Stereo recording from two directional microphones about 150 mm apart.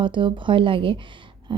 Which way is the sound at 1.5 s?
30° right (ahead or behind).